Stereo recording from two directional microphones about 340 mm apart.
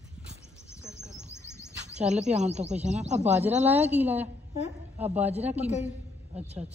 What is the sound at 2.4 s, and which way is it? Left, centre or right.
Speech, centre.